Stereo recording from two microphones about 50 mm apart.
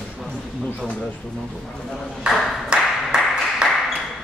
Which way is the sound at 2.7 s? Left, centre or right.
Centre.